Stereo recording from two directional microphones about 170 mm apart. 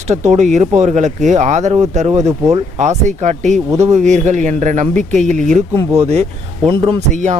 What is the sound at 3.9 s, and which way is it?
Speech, 45° right (ahead or behind).